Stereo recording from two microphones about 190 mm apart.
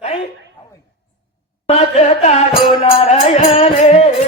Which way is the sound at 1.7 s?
35° left (ahead or behind).